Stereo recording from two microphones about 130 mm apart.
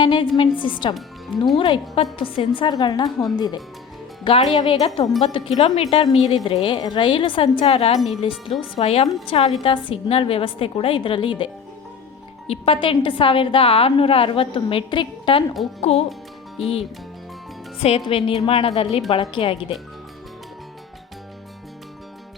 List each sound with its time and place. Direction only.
0.0 s music: 40° left (ahead or behind)
0.3 s a woman's voice: 40° left (ahead or behind)
4.2 s a woman's voice: 45° left (ahead or behind)
5.9 s a woman's voice: 35° left (ahead or behind)
7.9 s speech: centre (ahead or behind)
8.2 s a woman's voice: 40° left (ahead or behind)
12.5 s a woman's voice: 45° left (ahead or behind)
15.8 s a woman's voice: 50° left (ahead or behind)
17.8 s a woman's voice: 50° left (ahead or behind)